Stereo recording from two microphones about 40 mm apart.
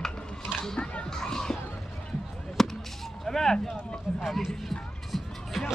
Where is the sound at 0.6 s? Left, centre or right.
Centre.